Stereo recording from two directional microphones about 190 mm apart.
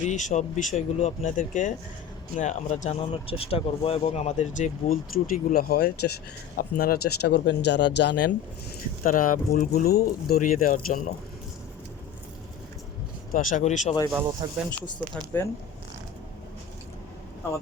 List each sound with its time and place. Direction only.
0.0 s speech: 40° left (ahead or behind); by 8.3 s 65° left (ahead or behind)
9.0 s speech: 45° left (ahead or behind)
13.3 s speech: 45° left (ahead or behind)
14.4 s speech: 20° right (ahead or behind)
14.8 s speech: 10° left (ahead or behind)